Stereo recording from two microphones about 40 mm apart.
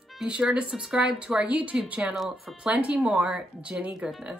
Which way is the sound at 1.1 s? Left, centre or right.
Right.